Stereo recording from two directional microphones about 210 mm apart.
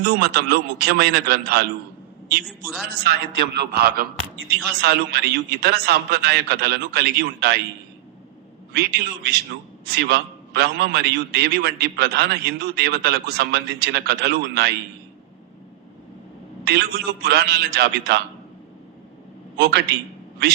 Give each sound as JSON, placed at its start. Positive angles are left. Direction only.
{"t": 0.0, "sound": "a man's voice", "side_deg": -50}
{"t": 2.5, "sound": "a man's voice", "side_deg": 0}
{"t": 3.1, "sound": "a man's voice", "side_deg": -50}
{"t": 8.7, "sound": "a man's voice", "side_deg": -50}
{"t": 16.6, "sound": "a man's voice", "side_deg": -50}
{"t": 19.5, "sound": "a man's voice", "side_deg": -50}